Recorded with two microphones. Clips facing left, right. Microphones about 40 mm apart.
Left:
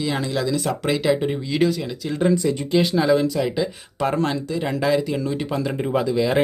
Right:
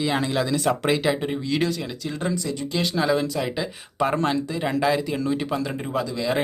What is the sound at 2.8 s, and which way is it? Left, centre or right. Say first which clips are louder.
Speech: left 4 dB; centre.